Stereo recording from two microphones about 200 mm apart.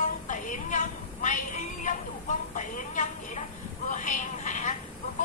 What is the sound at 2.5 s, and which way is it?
Speech, 40° left (ahead or behind).